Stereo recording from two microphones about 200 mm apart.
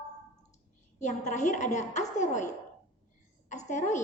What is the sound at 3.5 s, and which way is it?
Speech, 35° left (ahead or behind).